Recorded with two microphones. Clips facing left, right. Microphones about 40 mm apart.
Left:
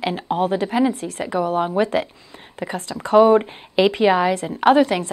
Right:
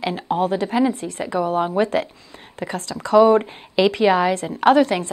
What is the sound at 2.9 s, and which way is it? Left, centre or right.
Speech, left.